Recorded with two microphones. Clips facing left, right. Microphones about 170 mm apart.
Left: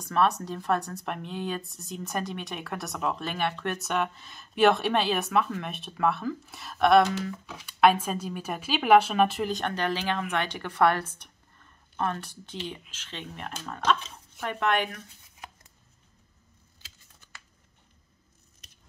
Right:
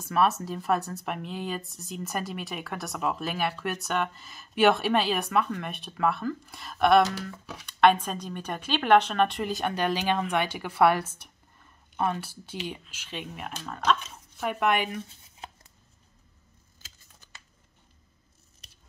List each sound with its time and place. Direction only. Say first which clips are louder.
0.0 s a woman's voice: even; 5° right (ahead or behind); by 15.5 s 25° right (ahead or behind)